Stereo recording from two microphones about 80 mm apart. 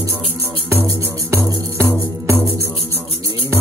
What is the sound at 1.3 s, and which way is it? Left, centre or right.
Music, right.